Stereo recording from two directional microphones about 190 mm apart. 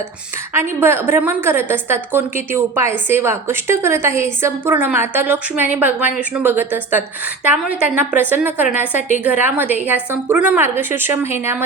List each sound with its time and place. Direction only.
0.5 s a woman's voice: 10° right (ahead or behind)